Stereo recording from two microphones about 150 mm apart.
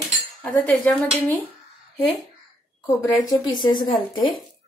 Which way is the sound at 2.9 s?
25° left (ahead or behind).